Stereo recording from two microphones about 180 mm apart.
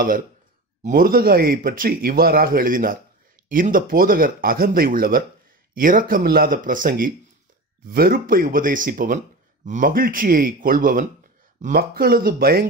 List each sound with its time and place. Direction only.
0.8 s speech: 55° right (ahead or behind)